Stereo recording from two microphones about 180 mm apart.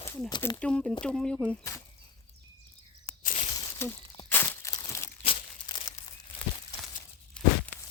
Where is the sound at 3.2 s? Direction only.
40° left (ahead or behind).